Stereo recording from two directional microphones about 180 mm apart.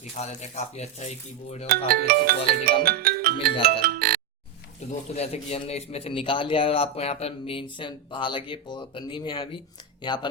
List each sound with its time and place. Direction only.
0.2 s speech: 40° left (ahead or behind)
1.6 s speech: 55° right (ahead or behind)
2.8 s music: 55° right (ahead or behind)
4.9 s a man's voice: 35° left (ahead or behind)